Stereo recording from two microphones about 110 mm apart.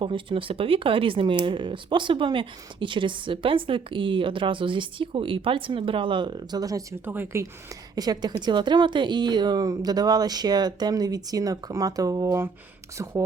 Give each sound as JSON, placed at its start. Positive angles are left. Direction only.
{"t": 0.0, "sound": "speech", "side_deg": -50}
{"t": 7.0, "sound": "speech", "side_deg": -20}
{"t": 7.9, "sound": "a woman's voice", "side_deg": -35}